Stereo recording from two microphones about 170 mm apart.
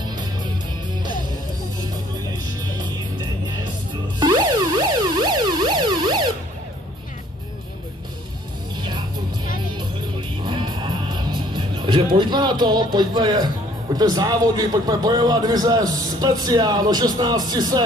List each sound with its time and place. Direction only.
0.0 s music: 25° right (ahead or behind)
2.3 s music: 25° right (ahead or behind)
4.2 s siren: 25° right (ahead or behind)
10.4 s music: 25° right (ahead or behind)
13.9 s a man's voice: 25° right (ahead or behind)